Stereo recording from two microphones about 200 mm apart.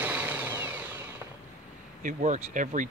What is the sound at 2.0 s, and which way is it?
Speech, 40° right (ahead or behind).